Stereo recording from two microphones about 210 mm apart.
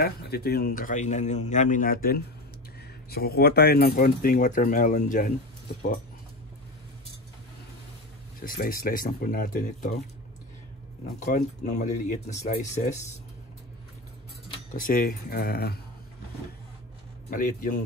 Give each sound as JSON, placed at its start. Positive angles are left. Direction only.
{"t": 0.0, "sound": "speech", "side_deg": 45}
{"t": 8.4, "sound": "speech", "side_deg": 45}
{"t": 11.3, "sound": "speech", "side_deg": 35}
{"t": 14.8, "sound": "speech", "side_deg": 40}
{"t": 17.3, "sound": "speech", "side_deg": 40}